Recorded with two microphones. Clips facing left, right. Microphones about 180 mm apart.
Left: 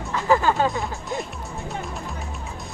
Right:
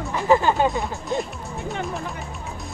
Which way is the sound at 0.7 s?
Centre (ahead or behind).